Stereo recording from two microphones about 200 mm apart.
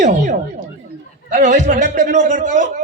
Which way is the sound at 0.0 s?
40° right (ahead or behind).